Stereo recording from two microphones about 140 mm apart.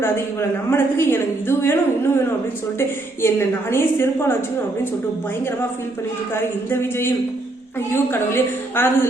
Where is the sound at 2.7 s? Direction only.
15° left (ahead or behind).